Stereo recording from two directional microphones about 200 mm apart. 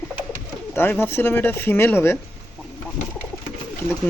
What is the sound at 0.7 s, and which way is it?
Speech, 10° left (ahead or behind).